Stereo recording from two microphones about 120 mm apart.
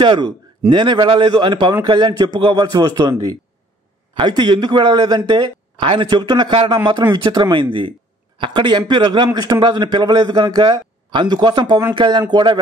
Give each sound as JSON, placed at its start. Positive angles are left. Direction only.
{"t": 0.0, "sound": "a man's voice", "side_deg": -40}